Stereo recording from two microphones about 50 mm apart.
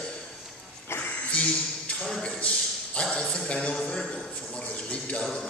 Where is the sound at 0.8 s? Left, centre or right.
Left.